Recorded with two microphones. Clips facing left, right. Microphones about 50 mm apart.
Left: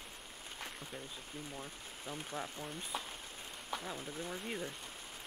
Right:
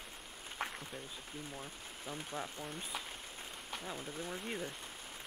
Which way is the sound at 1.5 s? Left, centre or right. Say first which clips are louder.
Even; centre.